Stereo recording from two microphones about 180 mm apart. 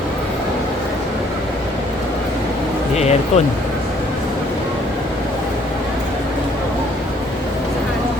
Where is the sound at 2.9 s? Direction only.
35° left (ahead or behind).